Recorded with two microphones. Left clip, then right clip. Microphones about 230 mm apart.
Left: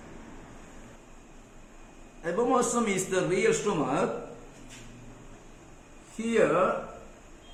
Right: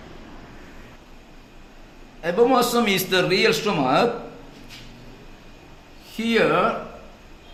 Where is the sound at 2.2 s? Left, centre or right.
Right.